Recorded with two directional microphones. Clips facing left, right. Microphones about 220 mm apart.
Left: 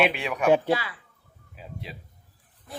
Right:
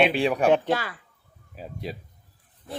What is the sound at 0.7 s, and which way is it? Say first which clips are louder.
Speech: even; 45° right (ahead or behind).